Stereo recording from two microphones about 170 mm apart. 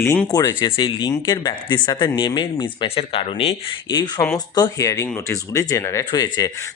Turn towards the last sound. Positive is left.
turn(degrees=20)  # may be behind; listen again after turning